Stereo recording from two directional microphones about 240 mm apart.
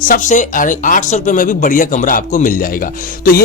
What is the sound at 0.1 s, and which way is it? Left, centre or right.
Speech, left.